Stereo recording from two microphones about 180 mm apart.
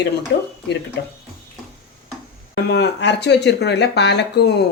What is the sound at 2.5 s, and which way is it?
Speech, 75° left (ahead or behind).